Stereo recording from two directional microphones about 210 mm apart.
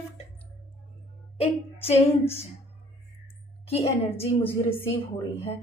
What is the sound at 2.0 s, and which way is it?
Speech, 10° left (ahead or behind).